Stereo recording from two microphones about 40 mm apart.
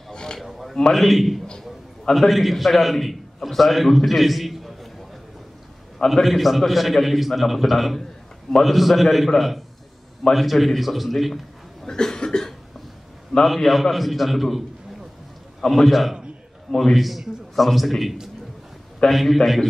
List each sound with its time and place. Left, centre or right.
0.1 s a sound: left
0.4 s a sound: centre
0.9 s a man's voice: centre
6.2 s a man's voice: centre
10.3 s a man's voice: centre
11.8 s cough: centre
13.4 s a man's voice: centre
15.6 s a man's voice: centre
16.7 s a man's voice: centre
17.0 s a man's voice: centre